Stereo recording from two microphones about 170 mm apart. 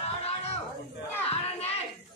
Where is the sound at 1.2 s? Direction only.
35° left (ahead or behind).